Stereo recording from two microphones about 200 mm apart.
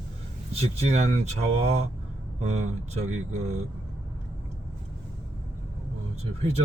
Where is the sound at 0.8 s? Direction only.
30° right (ahead or behind).